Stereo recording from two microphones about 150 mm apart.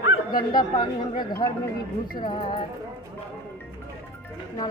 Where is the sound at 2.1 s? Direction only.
35° left (ahead or behind).